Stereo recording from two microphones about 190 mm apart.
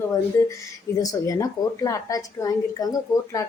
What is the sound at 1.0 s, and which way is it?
A woman's voice, 20° left (ahead or behind).